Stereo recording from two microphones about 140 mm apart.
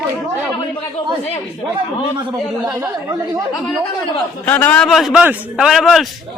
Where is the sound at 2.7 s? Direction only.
20° right (ahead or behind).